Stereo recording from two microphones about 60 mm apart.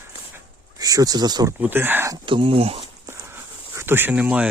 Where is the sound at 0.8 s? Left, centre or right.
Right.